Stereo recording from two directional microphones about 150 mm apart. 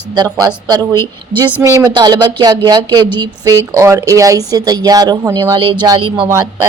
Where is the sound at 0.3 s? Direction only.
25° right (ahead or behind).